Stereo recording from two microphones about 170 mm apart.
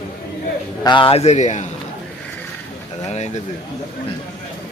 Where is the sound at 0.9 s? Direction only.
30° left (ahead or behind).